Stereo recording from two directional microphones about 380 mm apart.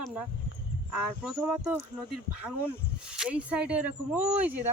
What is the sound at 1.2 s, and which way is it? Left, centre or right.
Speech, centre.